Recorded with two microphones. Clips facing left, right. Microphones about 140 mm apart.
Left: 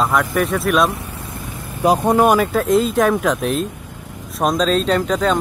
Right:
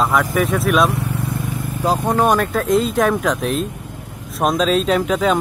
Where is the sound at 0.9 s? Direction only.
70° right (ahead or behind).